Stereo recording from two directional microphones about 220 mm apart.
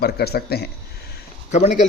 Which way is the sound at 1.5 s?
35° left (ahead or behind).